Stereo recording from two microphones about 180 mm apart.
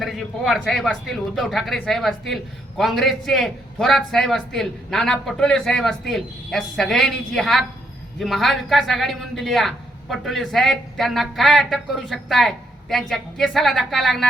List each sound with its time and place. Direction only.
0.0 s a man's voice: centre (ahead or behind)